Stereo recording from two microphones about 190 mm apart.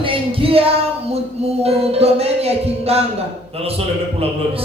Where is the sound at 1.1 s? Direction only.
35° right (ahead or behind).